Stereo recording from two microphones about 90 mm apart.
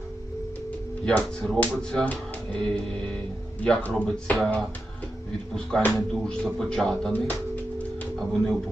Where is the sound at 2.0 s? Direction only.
15° left (ahead or behind).